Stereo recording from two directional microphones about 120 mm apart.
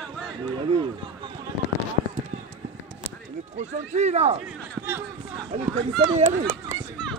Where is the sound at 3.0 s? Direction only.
75° right (ahead or behind).